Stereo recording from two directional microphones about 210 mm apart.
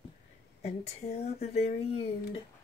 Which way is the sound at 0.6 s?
30° left (ahead or behind).